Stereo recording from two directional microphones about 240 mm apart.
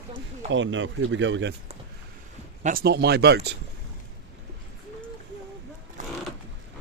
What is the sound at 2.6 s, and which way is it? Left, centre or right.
Speech, right.